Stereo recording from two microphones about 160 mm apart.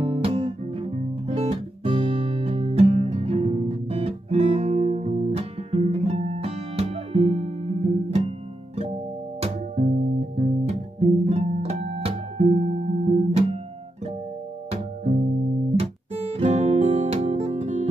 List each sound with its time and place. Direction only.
0.0 s guitar: 35° right (ahead or behind)
9.4 s music: 45° right (ahead or behind)
15.8 s music: 40° right (ahead or behind)